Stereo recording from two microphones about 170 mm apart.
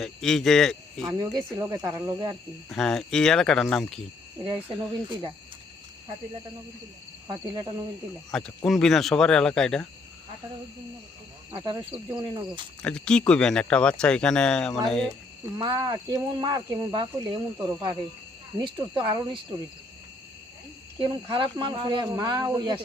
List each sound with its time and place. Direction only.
0.0 s speech: 5° left (ahead or behind)
1.0 s speech: 20° right (ahead or behind)
2.6 s speech: centre (ahead or behind)
4.4 s speech: 30° right (ahead or behind)
7.3 s speech: 20° right (ahead or behind)
8.3 s speech: 5° left (ahead or behind)
11.5 s speech: 20° right (ahead or behind)
12.8 s speech: 5° left (ahead or behind)
15.5 s speech: 25° right (ahead or behind)
21.0 s speech: 30° right (ahead or behind)